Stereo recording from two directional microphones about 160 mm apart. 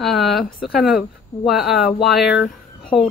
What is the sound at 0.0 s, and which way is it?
Speech, centre (ahead or behind).